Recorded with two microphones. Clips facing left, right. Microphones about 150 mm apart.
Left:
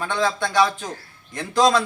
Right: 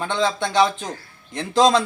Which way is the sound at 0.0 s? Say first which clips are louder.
Right 1 dB; 20° right (ahead or behind).